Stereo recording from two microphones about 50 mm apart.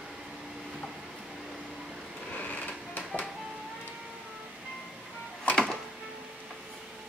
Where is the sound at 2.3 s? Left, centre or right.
Left.